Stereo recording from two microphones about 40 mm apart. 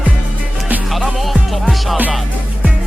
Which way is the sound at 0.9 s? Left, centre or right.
Centre.